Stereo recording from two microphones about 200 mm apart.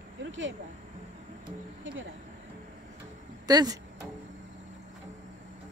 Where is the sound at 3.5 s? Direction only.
20° right (ahead or behind).